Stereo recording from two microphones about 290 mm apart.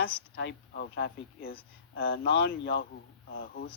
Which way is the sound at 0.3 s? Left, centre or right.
Left.